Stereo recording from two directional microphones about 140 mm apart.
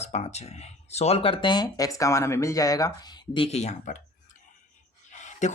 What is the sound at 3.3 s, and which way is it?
Speech, 45° left (ahead or behind).